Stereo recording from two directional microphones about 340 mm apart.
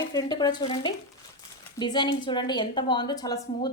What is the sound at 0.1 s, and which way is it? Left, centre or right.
A woman's voice, centre.